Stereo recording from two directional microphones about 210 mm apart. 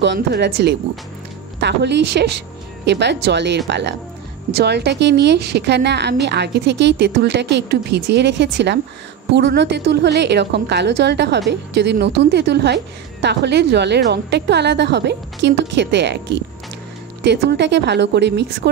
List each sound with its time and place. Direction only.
0.0 s a woman's voice: 55° right (ahead or behind)
17.2 s speech: 55° right (ahead or behind)